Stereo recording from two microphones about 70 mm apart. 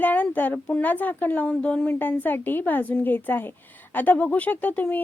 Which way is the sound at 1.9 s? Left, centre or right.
Left.